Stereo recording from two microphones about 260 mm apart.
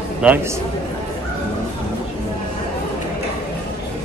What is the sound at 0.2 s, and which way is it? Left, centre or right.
Speech, centre.